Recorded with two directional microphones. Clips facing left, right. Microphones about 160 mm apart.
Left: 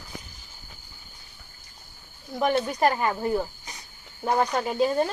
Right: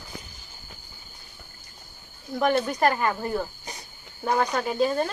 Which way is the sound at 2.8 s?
15° left (ahead or behind).